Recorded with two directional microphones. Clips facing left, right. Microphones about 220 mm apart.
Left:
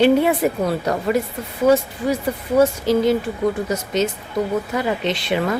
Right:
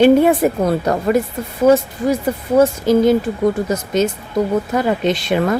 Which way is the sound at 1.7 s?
45° right (ahead or behind).